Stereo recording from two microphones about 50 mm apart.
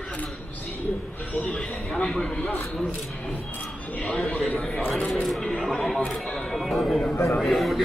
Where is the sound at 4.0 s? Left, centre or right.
Left.